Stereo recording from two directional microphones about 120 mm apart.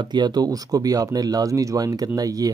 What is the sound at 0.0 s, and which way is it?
Speech, 40° right (ahead or behind).